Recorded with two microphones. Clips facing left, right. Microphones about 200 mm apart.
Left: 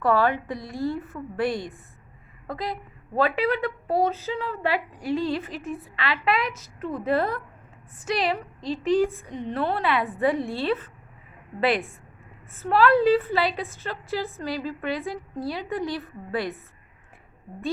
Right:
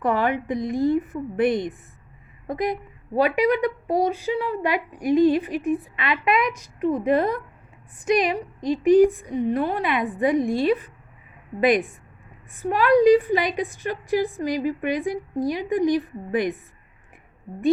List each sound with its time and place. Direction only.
0.0 s a woman's voice: 20° right (ahead or behind)